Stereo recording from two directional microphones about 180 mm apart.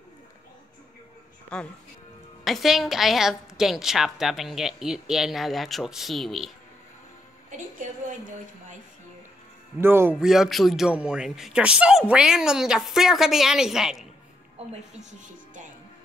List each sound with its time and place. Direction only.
1.5 s a woman's voice: 5° left (ahead or behind)
9.8 s speech: 15° right (ahead or behind)
10.3 s a woman's voice: centre (ahead or behind)
15.0 s speech: 45° right (ahead or behind)